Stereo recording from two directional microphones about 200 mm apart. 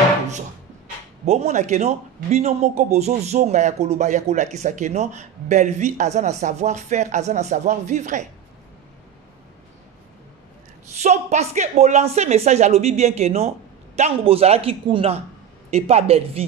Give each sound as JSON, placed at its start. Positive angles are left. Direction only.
{"t": 1.2, "sound": "a man's voice", "side_deg": -35}
{"t": 11.0, "sound": "a man's voice", "side_deg": -35}